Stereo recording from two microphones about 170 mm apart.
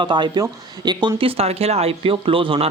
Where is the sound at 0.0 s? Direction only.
25° right (ahead or behind).